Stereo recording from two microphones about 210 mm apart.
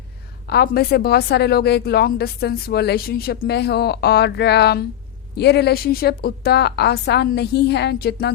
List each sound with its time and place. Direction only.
0.4 s speech: 50° left (ahead or behind)